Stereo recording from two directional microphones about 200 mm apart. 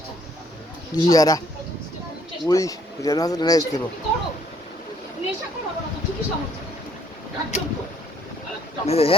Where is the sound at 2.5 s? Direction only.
15° left (ahead or behind).